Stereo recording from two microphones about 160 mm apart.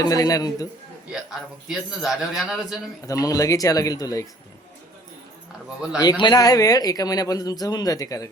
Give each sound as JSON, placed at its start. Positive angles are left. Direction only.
{"t": 0.0, "sound": "speech", "side_deg": 25}
{"t": 1.1, "sound": "a man's voice", "side_deg": 0}
{"t": 3.1, "sound": "speech", "side_deg": 20}
{"t": 6.0, "sound": "speech", "side_deg": 25}